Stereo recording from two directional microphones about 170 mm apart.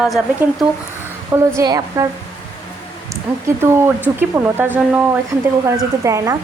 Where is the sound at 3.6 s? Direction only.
15° right (ahead or behind).